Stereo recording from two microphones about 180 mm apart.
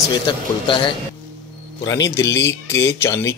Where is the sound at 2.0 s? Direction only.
15° left (ahead or behind).